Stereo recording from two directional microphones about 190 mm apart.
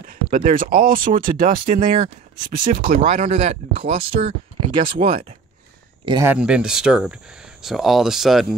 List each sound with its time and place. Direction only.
0.0 s speech: 45° right (ahead or behind); by 5.2 s 30° right (ahead or behind)
6.0 s speech: 20° right (ahead or behind)
6.3 s speech: 5° right (ahead or behind)